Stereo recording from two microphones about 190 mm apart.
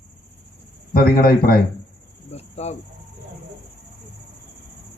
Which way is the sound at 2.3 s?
35° left (ahead or behind).